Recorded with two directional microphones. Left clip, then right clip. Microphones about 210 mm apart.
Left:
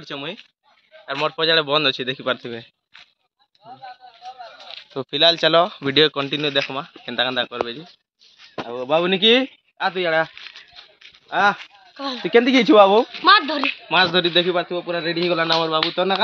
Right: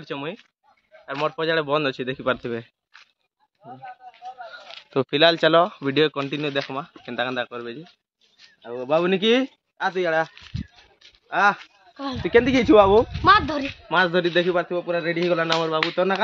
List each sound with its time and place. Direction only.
0.0 s speech: 40° right (ahead or behind)
1.2 s a man's voice: 5° right (ahead or behind)
2.3 s speech: 40° right (ahead or behind)
4.9 s speech: 45° right (ahead or behind)
5.2 s speech: 25° right (ahead or behind)
5.5 s a man's voice: 10° right (ahead or behind)
9.9 s speech: 35° left (ahead or behind)
11.2 s speech: 35° left (ahead or behind)
11.9 s speech: centre (ahead or behind)
12.2 s speech: 50° left (ahead or behind)
13.2 s speech: 20° right (ahead or behind)
13.8 s a man's voice: 10° left (ahead or behind); by 16.1 s 5° right (ahead or behind)